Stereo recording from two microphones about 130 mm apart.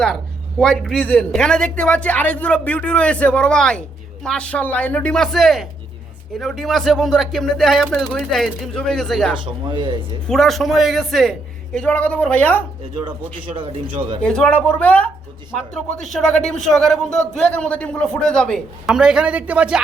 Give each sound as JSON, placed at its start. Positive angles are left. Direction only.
{"t": 0.6, "sound": "a woman's voice", "side_deg": 5}
{"t": 9.7, "sound": "a man's voice", "side_deg": -40}
{"t": 10.2, "sound": "a man's voice", "side_deg": 0}
{"t": 13.0, "sound": "a man's voice", "side_deg": -40}
{"t": 14.2, "sound": "a woman's voice", "side_deg": 5}